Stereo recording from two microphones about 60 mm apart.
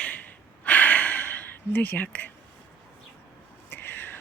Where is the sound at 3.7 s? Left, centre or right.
Left.